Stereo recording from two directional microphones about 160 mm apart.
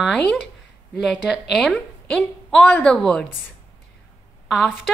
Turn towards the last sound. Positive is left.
turn(degrees=0)  # may be behind; listen again after turning